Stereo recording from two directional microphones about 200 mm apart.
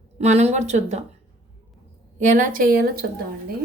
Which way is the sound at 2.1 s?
40° right (ahead or behind).